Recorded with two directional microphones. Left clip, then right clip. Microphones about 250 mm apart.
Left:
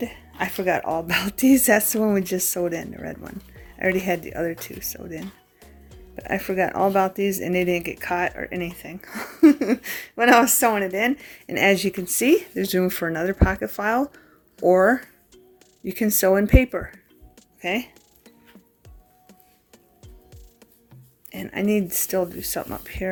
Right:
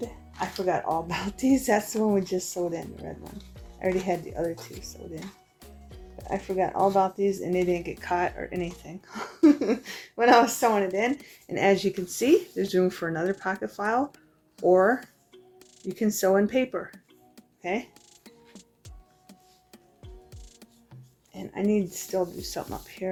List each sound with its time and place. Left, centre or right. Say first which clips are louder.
0.3 s speech: left 4 dB; left
6.2 s speech: left 4 dB; left
21.2 s speech: left 3 dB; left